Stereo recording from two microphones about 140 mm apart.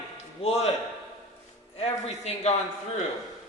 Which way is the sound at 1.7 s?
50° left (ahead or behind).